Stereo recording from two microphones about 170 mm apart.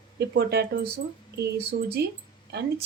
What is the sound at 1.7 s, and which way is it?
Speech, 70° right (ahead or behind).